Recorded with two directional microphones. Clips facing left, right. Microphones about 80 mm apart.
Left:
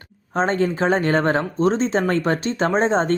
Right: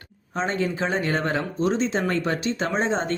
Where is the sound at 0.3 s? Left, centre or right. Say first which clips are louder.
Left 5 dB; left.